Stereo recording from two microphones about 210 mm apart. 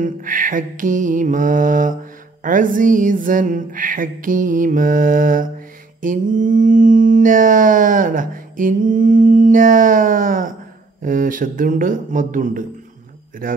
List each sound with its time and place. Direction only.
0.0 s mantra: 40° right (ahead or behind)
13.4 s speech: 45° right (ahead or behind)